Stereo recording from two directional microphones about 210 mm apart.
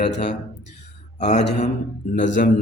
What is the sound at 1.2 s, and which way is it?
Speech, 35° left (ahead or behind).